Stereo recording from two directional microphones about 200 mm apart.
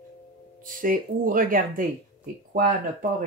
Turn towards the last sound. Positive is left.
turn(degrees=-45)  # may be behind; listen again after turning